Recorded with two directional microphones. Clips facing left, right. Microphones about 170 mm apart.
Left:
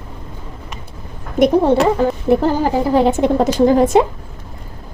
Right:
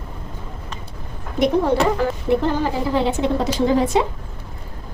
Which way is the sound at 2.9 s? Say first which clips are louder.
Left 6 dB; 45° left (ahead or behind).